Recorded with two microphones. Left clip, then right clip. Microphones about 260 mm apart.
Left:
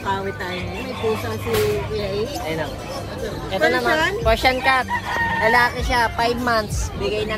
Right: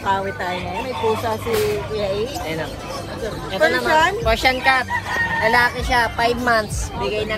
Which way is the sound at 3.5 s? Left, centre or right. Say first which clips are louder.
Right 2 dB; left.